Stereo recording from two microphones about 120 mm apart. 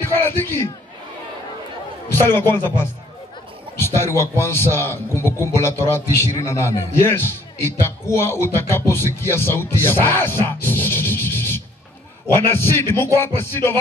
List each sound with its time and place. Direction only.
0.0 s a man's voice: 20° left (ahead or behind)
2.0 s a man's voice: 20° left (ahead or behind)
3.7 s a man's voice: 20° left (ahead or behind)